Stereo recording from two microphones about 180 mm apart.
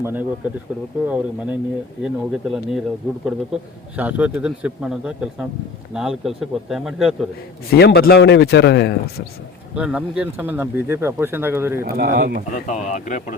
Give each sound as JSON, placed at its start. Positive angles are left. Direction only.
{"t": 0.0, "sound": "a man's voice", "side_deg": -10}
{"t": 7.8, "sound": "a man's voice", "side_deg": 65}
{"t": 9.7, "sound": "speech", "side_deg": -5}
{"t": 11.9, "sound": "speech", "side_deg": -55}
{"t": 12.5, "sound": "speech", "side_deg": 40}